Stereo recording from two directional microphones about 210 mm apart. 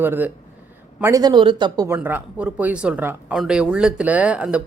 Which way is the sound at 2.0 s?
5° right (ahead or behind).